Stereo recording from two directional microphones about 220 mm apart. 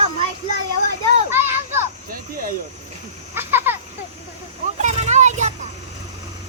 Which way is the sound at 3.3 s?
10° right (ahead or behind).